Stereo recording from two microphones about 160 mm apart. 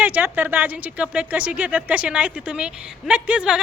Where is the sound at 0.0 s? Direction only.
10° right (ahead or behind).